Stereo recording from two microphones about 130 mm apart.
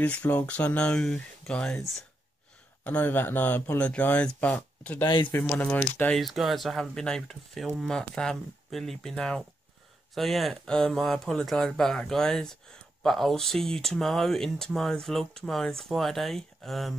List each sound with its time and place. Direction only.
0.0 s speech: 10° left (ahead or behind)
2.8 s speech: 10° left (ahead or behind)
5.0 s speech: 40° left (ahead or behind)
5.4 s speech: 10° left (ahead or behind)
6.1 s speech: centre (ahead or behind)